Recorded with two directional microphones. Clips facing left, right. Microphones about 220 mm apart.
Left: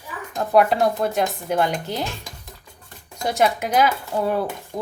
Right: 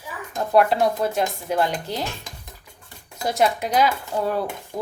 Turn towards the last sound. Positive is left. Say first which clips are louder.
# even
turn(degrees=-5)  # may be behind; listen again after turning